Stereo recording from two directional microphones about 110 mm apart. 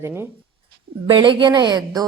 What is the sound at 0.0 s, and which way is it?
Speech, 20° right (ahead or behind).